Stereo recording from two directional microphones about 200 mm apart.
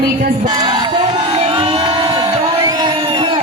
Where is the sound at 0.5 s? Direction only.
25° right (ahead or behind).